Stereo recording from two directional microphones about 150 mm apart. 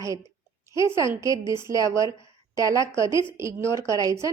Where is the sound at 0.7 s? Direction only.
20° right (ahead or behind).